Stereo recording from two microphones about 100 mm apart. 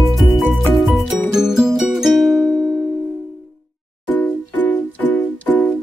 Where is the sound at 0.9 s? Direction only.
Centre (ahead or behind).